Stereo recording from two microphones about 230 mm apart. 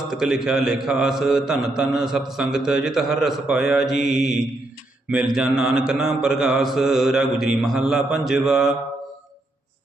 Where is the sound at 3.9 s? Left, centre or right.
Left.